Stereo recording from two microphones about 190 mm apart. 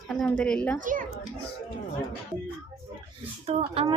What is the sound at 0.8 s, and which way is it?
Speech, 45° right (ahead or behind).